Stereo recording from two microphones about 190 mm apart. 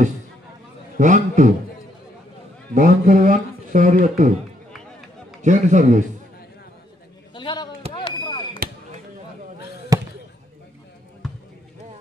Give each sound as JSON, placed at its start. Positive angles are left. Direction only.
{"t": 0.9, "sound": "a man's voice", "side_deg": -40}
{"t": 2.7, "sound": "speech", "side_deg": -45}
{"t": 5.4, "sound": "a man's voice", "side_deg": -40}
{"t": 7.3, "sound": "a sound", "side_deg": 25}
{"t": 8.6, "sound": "basketball bounce", "side_deg": -50}
{"t": 9.9, "sound": "basketball bounce", "side_deg": -20}
{"t": 11.2, "sound": "basketball bounce", "side_deg": 0}